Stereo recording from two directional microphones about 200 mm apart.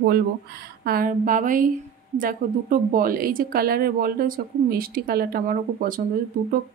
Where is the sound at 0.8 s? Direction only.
45° right (ahead or behind).